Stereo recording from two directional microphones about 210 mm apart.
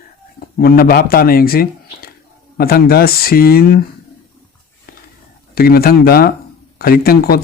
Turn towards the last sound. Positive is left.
turn(degrees=45)  # may be behind; listen again after turning